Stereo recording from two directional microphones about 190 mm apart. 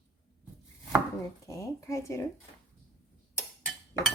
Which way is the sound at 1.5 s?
15° left (ahead or behind).